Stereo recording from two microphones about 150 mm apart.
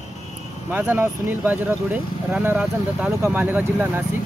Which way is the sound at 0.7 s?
10° right (ahead or behind).